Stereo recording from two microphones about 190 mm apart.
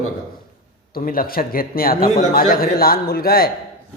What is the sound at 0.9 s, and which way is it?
Speech, 50° left (ahead or behind).